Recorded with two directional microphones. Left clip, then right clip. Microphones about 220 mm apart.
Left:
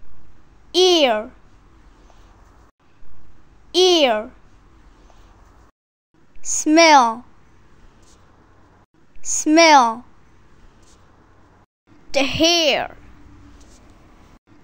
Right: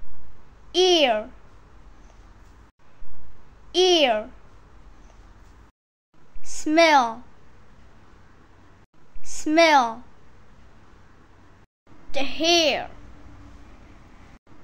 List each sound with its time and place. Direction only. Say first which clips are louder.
0.7 s a child's voice: left 4 dB; 20° left (ahead or behind)
3.7 s a child's voice: left 4 dB; 20° left (ahead or behind)
6.4 s a child's voice: left 5 dB; 30° left (ahead or behind)
9.2 s a child's voice: left 5 dB; 30° left (ahead or behind)
12.1 s a woman's voice: left 5 dB; 35° left (ahead or behind)